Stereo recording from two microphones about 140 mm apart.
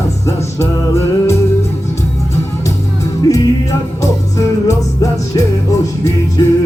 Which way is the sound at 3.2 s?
25° left (ahead or behind).